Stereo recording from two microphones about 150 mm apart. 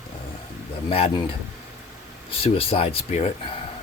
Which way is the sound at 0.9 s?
40° left (ahead or behind).